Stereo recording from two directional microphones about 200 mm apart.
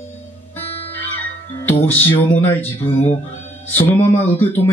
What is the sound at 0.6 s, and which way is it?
Music, 30° left (ahead or behind).